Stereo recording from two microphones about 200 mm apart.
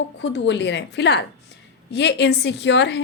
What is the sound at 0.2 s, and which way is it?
A woman's voice, 65° left (ahead or behind).